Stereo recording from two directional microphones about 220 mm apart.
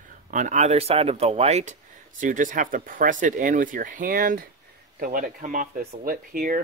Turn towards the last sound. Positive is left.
turn(degrees=-40)  # may be behind; listen again after turning